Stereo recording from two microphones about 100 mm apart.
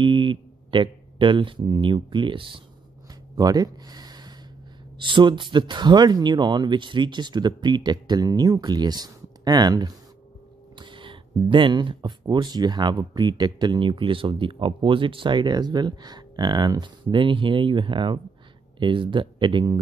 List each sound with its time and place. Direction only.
0.0 s speech: 55° right (ahead or behind)
3.3 s speech: 40° right (ahead or behind)
10.8 s speech: 55° right (ahead or behind)